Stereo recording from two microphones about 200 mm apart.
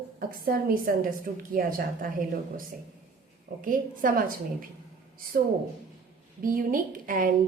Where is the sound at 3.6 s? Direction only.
45° right (ahead or behind).